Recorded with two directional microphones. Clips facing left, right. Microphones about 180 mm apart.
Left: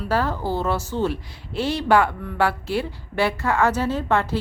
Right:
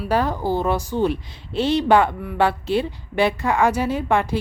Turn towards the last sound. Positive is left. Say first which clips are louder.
# right 1 dB
turn(degrees=-15)  # may be behind; listen again after turning